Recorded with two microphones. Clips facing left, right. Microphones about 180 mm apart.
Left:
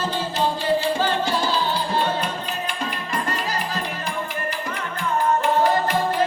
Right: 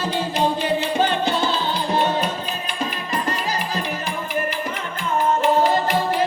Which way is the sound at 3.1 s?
20° right (ahead or behind).